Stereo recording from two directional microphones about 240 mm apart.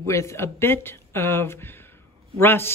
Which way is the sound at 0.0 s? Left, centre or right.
Centre.